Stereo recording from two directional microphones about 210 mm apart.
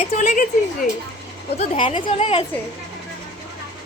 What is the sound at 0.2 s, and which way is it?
Speech, 40° left (ahead or behind).